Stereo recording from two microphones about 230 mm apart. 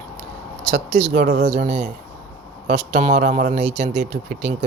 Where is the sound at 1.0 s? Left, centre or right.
Right.